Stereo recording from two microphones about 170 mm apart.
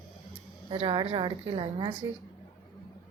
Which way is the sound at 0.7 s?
30° right (ahead or behind).